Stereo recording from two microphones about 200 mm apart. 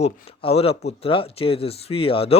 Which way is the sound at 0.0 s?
30° left (ahead or behind).